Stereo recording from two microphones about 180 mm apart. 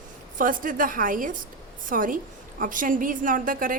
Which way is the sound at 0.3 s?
50° right (ahead or behind).